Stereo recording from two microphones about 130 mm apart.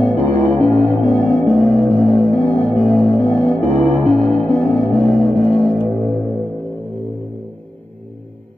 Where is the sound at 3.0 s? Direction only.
45° left (ahead or behind).